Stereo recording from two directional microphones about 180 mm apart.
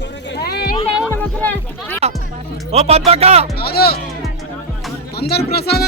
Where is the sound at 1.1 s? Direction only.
10° left (ahead or behind).